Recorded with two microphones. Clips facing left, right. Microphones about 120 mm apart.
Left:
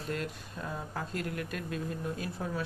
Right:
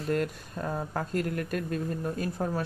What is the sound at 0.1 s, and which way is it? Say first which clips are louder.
Speech: right 8 dB; 50° right (ahead or behind).